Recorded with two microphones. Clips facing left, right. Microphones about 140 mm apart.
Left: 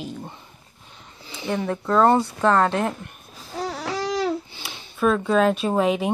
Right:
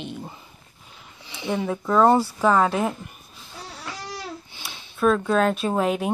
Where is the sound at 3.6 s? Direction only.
90° left.